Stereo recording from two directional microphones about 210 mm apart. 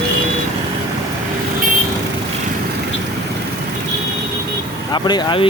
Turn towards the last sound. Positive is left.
turn(degrees=20)  # may be behind; listen again after turning